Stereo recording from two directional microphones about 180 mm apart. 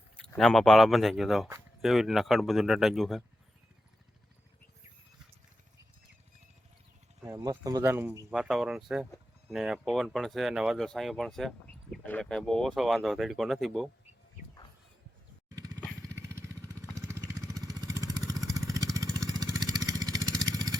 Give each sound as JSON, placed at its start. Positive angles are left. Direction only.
{"t": 0.2, "sound": "speech", "side_deg": 0}
{"t": 7.2, "sound": "speech", "side_deg": -15}
{"t": 8.3, "sound": "speech", "side_deg": 0}
{"t": 16.2, "sound": "vehicle", "side_deg": -15}